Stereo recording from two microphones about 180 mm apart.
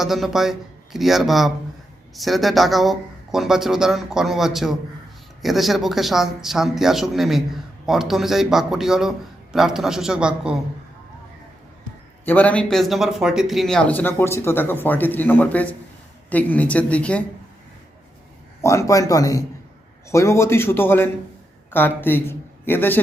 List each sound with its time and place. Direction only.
0.0 s speech: centre (ahead or behind)
12.2 s speech: 10° left (ahead or behind)
18.6 s speech: 15° left (ahead or behind)